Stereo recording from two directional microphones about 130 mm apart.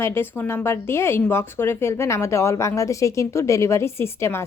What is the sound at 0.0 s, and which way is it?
Speech, 15° left (ahead or behind).